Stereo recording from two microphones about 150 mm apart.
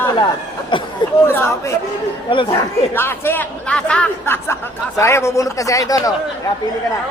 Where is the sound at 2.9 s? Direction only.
15° left (ahead or behind).